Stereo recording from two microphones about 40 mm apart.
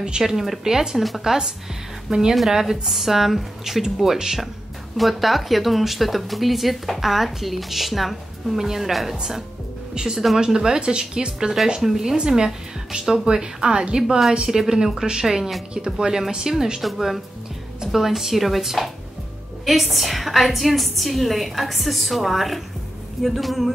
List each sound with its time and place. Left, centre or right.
0.2 s a woman's voice: centre
14.6 s speech: centre
16.8 s speech: centre